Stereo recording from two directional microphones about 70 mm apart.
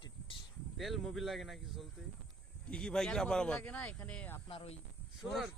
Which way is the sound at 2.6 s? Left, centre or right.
Centre.